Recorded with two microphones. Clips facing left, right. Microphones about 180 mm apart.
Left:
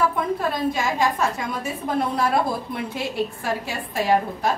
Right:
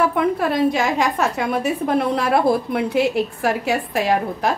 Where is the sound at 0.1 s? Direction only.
75° right (ahead or behind).